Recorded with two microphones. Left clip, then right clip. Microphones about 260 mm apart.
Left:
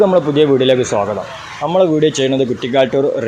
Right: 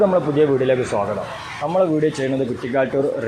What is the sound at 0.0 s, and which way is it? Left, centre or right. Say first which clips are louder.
A man's voice: left 5 dB; left.